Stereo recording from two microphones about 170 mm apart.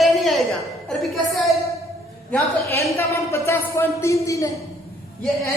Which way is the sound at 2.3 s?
15° left (ahead or behind).